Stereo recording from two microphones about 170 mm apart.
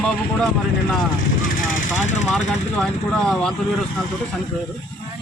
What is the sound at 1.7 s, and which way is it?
Vehicle, 50° left (ahead or behind).